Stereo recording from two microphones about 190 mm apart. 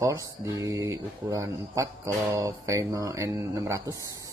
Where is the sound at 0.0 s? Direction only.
20° right (ahead or behind).